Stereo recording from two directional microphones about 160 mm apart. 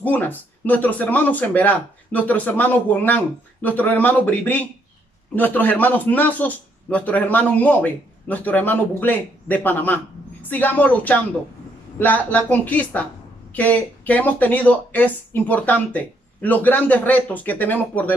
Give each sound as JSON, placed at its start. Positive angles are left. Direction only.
{"t": 0.0, "sound": "a man's voice", "side_deg": 10}